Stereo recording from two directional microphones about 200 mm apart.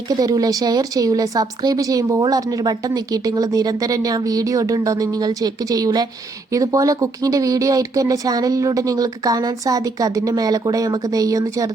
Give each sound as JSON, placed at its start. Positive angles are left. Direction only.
{"t": 0.2, "sound": "speech", "side_deg": -20}